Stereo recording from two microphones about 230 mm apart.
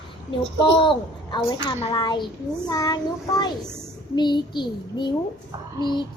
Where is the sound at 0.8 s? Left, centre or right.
Left.